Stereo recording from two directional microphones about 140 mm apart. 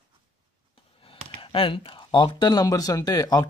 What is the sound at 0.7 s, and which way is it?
Speech, 40° left (ahead or behind).